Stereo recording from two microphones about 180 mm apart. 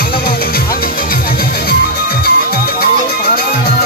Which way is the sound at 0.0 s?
55° left (ahead or behind).